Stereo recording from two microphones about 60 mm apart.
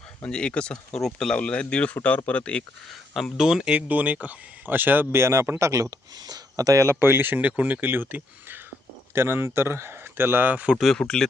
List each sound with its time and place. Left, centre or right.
0.3 s speech: centre
1.4 s speech: centre
3.3 s speech: centre
3.8 s speech: right
5.2 s speech: right
7.0 s speech: right
9.1 s speech: right
10.7 s speech: centre
10.9 s speech: centre